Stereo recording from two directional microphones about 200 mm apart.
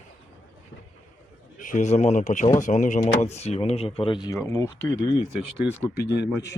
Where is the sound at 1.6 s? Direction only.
40° left (ahead or behind); by 4.7 s 15° left (ahead or behind).